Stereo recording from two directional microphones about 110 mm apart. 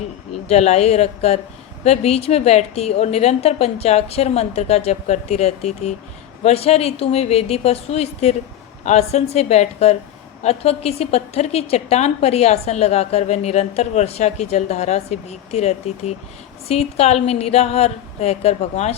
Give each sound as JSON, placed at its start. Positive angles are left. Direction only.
{"t": 0.4, "sound": "a woman's voice", "side_deg": 80}
{"t": 6.4, "sound": "a woman's voice", "side_deg": 70}
{"t": 8.8, "sound": "a woman's voice", "side_deg": 90}